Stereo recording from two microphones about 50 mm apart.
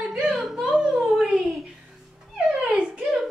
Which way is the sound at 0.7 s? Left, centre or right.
Centre.